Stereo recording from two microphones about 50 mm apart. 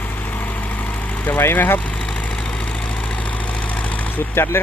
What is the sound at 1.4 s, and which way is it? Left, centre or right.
Speech, left.